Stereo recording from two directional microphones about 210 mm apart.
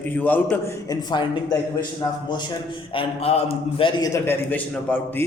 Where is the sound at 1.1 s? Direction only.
20° left (ahead or behind).